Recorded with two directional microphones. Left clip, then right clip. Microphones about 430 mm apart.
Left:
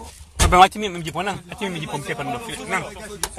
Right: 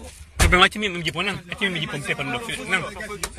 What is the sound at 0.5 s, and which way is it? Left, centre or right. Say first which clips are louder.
Speech: left 4 dB; centre.